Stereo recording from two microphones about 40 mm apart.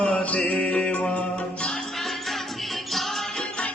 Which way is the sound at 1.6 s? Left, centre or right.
Centre.